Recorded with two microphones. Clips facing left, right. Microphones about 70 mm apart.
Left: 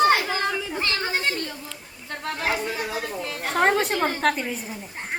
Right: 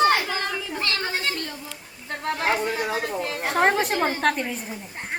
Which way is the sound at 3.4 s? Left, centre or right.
Centre.